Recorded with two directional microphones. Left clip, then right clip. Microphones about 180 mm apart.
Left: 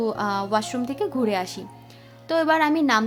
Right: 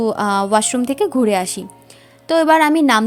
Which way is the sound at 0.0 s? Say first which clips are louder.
Right 7 dB; 30° right (ahead or behind).